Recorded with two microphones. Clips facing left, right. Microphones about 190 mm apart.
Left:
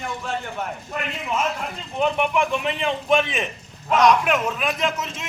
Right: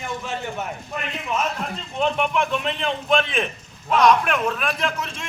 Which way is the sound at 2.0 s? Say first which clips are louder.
Left 1 dB; 10° left (ahead or behind).